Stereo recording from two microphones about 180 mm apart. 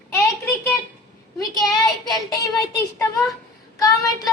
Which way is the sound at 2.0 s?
Centre (ahead or behind).